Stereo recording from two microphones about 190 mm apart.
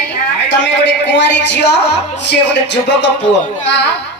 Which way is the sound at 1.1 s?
65° left (ahead or behind).